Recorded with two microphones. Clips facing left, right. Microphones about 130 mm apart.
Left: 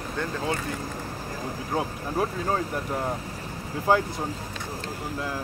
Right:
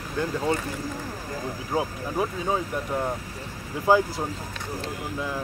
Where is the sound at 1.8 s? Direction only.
5° right (ahead or behind).